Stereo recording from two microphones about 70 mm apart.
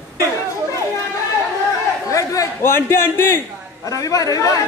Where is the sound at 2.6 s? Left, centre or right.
Left.